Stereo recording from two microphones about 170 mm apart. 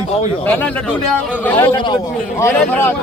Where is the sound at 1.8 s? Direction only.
25° left (ahead or behind).